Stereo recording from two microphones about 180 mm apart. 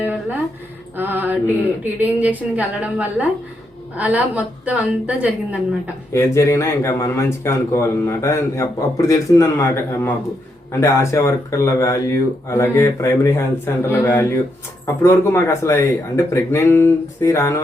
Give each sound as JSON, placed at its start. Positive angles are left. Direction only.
{"t": 0.0, "sound": "a sound", "side_deg": -10}
{"t": 0.9, "sound": "a woman's voice", "side_deg": -10}
{"t": 6.1, "sound": "speech", "side_deg": 15}